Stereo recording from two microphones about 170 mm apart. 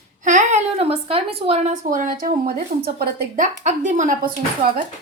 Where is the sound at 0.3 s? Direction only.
45° right (ahead or behind).